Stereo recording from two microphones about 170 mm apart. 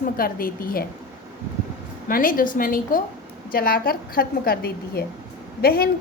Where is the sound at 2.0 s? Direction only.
55° left (ahead or behind).